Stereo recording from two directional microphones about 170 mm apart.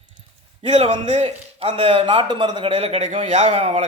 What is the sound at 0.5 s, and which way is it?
A man's voice, 40° right (ahead or behind).